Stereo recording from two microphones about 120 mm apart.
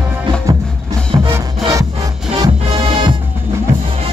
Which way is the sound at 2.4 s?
45° right (ahead or behind).